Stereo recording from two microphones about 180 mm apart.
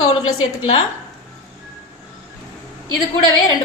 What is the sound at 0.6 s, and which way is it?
Speech, 30° left (ahead or behind).